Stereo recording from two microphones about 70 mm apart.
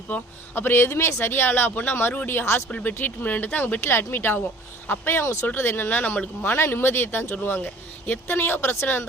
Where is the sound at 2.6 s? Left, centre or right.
Centre; by 5.5 s left.